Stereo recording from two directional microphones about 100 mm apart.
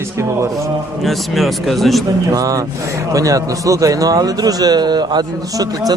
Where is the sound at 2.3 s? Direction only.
35° right (ahead or behind).